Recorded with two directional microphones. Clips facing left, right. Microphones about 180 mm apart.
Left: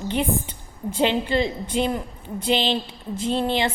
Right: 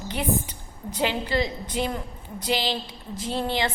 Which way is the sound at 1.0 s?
25° left (ahead or behind).